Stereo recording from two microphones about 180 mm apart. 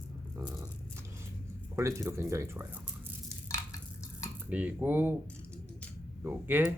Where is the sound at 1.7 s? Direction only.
15° right (ahead or behind).